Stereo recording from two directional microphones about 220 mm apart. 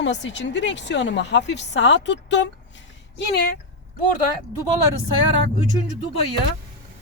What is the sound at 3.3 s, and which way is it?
Speech, 40° left (ahead or behind).